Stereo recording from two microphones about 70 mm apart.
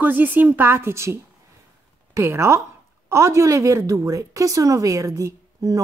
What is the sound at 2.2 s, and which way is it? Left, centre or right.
A woman's voice, right.